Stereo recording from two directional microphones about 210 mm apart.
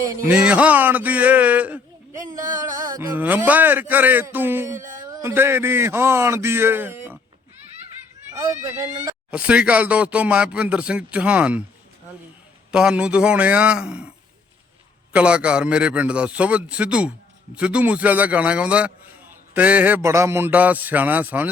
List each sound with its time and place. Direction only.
0.2 s speech: 5° right (ahead or behind)
8.3 s speech: 15° right (ahead or behind)
9.3 s speech: 5° right (ahead or behind)
12.7 s a man's voice: 5° right (ahead or behind)
15.1 s a man's voice: 5° right (ahead or behind)